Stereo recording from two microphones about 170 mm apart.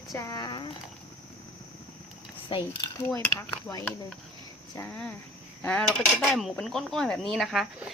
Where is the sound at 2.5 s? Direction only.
20° left (ahead or behind).